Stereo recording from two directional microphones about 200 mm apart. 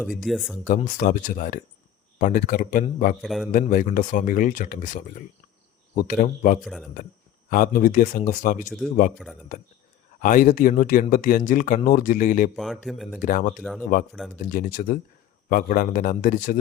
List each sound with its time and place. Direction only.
0.0 s speech: centre (ahead or behind)
0.7 s speech: 40° left (ahead or behind)
3.2 s speech: centre (ahead or behind)
3.5 s speech: 40° left (ahead or behind)
6.6 s speech: centre (ahead or behind)
7.5 s speech: 45° left (ahead or behind)
10.2 s speech: 40° left (ahead or behind)
12.5 s speech: centre (ahead or behind)
13.2 s speech: 40° left (ahead or behind)
13.6 s speech: centre (ahead or behind)
14.5 s speech: 45° left (ahead or behind)